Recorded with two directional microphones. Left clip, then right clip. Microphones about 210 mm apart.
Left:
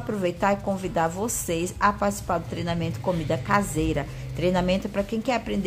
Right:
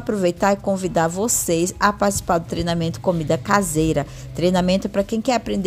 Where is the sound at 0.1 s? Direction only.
30° right (ahead or behind).